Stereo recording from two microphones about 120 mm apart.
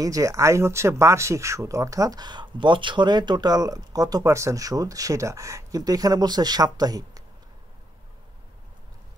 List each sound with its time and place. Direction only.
0.0 s speech: 30° right (ahead or behind)